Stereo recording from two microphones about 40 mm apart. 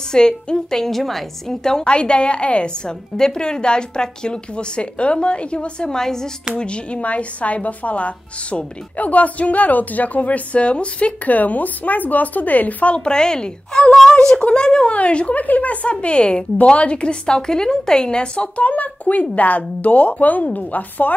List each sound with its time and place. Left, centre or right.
0.1 s a woman's voice: centre
1.6 s a woman's voice: centre
1.9 s speech: left
6.5 s a woman's voice: left
11.2 s speech: left
12.9 s speech: left
14.9 s a woman's voice: left
15.4 s a woman's voice: left